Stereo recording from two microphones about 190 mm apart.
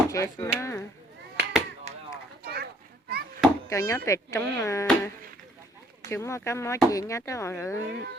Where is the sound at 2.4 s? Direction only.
55° right (ahead or behind).